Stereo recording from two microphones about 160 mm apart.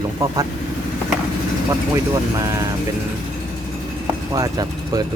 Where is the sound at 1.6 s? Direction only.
20° right (ahead or behind).